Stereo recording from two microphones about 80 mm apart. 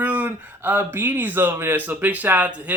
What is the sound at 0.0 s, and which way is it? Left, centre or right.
Speech, centre.